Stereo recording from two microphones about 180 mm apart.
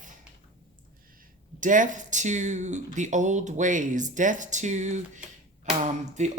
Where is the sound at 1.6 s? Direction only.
45° right (ahead or behind).